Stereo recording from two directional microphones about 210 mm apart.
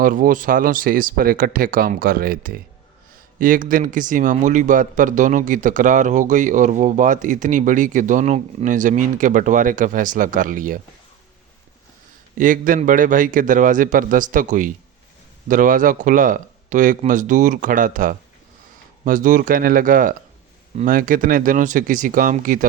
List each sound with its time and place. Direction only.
0.0 s a man's voice: 40° right (ahead or behind)
12.4 s a man's voice: 40° right (ahead or behind)